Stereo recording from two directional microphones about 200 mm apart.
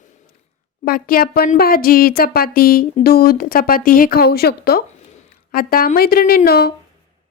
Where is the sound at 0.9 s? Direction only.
45° left (ahead or behind).